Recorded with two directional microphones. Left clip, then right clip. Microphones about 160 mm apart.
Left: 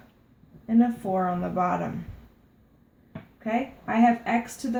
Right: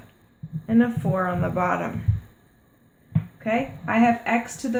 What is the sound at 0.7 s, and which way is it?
Speech, 35° right (ahead or behind).